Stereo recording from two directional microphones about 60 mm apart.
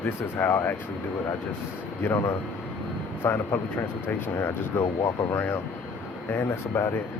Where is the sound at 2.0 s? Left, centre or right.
Left.